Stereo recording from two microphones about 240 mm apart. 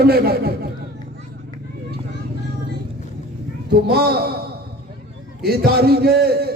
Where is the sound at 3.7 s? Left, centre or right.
Right.